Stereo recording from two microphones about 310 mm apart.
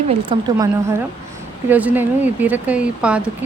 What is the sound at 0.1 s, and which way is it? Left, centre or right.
A woman's voice, centre.